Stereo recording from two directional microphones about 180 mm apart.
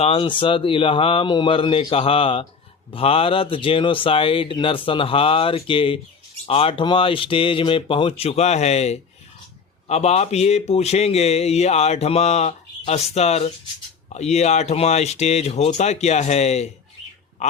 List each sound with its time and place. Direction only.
0.0 s a man's voice: 30° left (ahead or behind)